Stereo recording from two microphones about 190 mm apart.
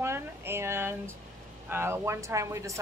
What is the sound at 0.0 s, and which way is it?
A woman's voice, 15° right (ahead or behind).